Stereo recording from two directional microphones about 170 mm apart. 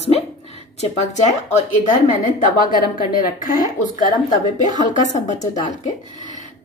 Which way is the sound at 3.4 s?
55° left (ahead or behind).